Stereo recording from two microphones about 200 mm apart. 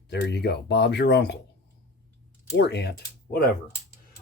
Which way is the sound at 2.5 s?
55° left (ahead or behind).